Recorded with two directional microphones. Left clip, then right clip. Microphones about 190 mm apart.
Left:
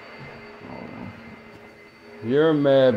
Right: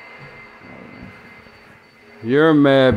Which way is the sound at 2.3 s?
40° right (ahead or behind).